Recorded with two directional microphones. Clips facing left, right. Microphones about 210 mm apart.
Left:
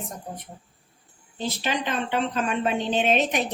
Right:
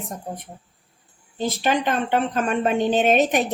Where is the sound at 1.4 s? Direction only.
50° right (ahead or behind).